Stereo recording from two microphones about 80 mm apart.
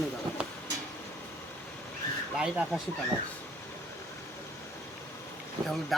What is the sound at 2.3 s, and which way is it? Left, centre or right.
Speech, centre.